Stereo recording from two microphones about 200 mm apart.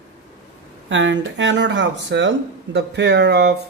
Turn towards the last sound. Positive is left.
turn(degrees=-55)  # may be behind; listen again after turning